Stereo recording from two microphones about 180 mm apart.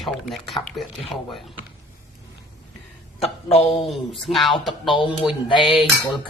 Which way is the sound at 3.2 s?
35° left (ahead or behind).